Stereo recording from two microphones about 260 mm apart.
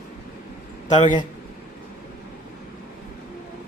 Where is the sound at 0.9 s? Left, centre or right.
Left.